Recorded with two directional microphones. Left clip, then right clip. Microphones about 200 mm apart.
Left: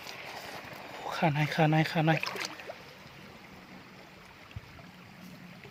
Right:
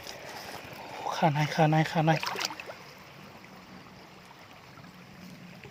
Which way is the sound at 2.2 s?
25° right (ahead or behind).